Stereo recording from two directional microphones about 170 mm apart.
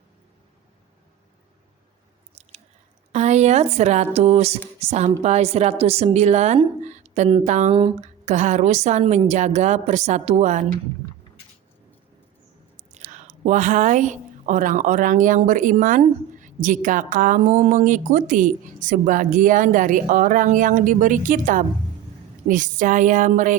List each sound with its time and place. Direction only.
3.1 s a woman's voice: 40° right (ahead or behind)
12.9 s a woman's voice: 45° right (ahead or behind)